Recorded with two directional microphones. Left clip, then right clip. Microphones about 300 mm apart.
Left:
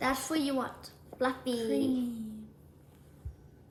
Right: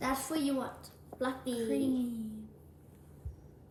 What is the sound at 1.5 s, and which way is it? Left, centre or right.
Speech, centre.